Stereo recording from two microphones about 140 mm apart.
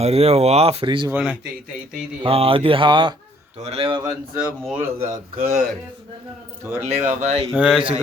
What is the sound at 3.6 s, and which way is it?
Speech, 50° right (ahead or behind).